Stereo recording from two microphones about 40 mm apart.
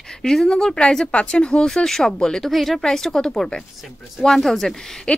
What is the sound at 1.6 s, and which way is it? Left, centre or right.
Speech, centre.